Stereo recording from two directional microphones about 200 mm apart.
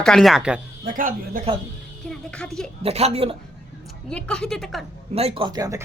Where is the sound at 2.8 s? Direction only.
30° right (ahead or behind).